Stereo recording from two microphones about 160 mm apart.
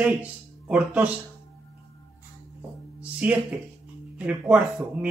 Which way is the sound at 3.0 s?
10° right (ahead or behind).